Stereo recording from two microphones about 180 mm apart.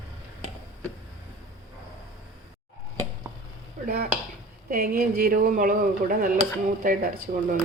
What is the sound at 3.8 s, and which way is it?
Speech, 55° right (ahead or behind).